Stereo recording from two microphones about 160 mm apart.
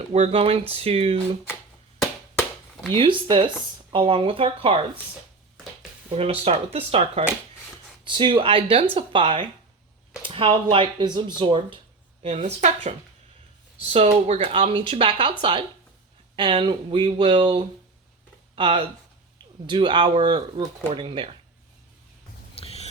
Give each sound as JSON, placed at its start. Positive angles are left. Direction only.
{"t": 0.1, "sound": "speech", "side_deg": -40}
{"t": 2.9, "sound": "speech", "side_deg": -30}
{"t": 6.4, "sound": "speech", "side_deg": -40}
{"t": 8.0, "sound": "a woman's voice", "side_deg": -30}
{"t": 22.6, "sound": "a sound", "side_deg": 40}